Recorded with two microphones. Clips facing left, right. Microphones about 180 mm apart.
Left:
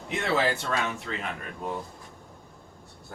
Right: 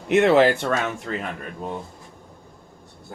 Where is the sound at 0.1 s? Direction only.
75° right (ahead or behind).